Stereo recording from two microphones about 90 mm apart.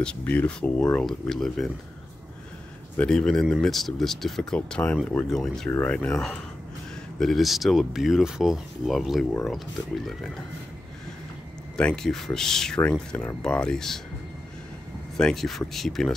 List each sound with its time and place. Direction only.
0.0 s speech: 15° left (ahead or behind)
3.0 s speech: 10° left (ahead or behind)
5.7 s speech: 20° left (ahead or behind)
5.9 s speech: 5° left (ahead or behind)
11.7 s speech: 10° left (ahead or behind)
15.1 s speech: 5° left (ahead or behind)